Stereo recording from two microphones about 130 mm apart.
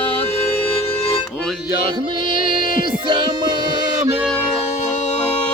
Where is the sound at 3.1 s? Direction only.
35° right (ahead or behind).